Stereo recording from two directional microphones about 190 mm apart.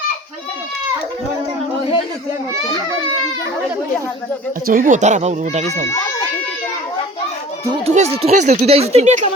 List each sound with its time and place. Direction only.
4.6 s speech: 45° right (ahead or behind)
7.9 s speech: 35° right (ahead or behind)